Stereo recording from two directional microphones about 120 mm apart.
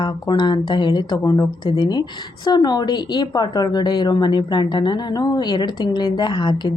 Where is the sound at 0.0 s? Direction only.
40° left (ahead or behind).